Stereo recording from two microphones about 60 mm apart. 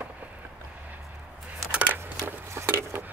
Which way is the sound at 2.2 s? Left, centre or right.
Right.